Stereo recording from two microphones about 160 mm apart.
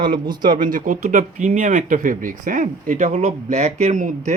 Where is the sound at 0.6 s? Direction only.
55° right (ahead or behind).